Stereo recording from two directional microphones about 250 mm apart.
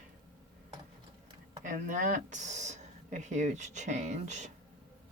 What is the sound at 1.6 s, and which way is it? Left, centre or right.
Speech, right.